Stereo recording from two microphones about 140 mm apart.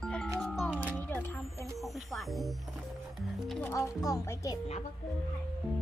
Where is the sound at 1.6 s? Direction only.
Centre (ahead or behind).